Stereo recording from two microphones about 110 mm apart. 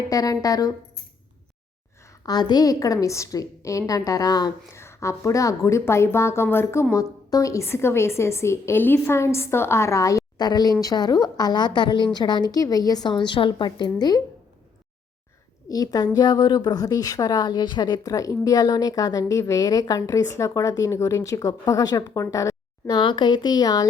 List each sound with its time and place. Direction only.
0.1 s a woman's voice: 30° left (ahead or behind)
2.2 s a woman's voice: 40° left (ahead or behind)
4.7 s a woman's voice: 25° left (ahead or behind); by 14.2 s 40° left (ahead or behind)
15.7 s a woman's voice: 35° left (ahead or behind)
23.0 s a woman's voice: 45° left (ahead or behind)